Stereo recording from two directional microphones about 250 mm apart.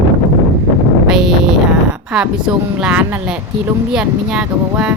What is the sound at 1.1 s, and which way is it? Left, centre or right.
Music, centre.